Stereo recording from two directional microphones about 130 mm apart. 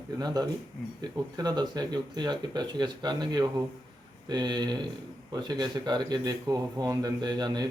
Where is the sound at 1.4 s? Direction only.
30° right (ahead or behind).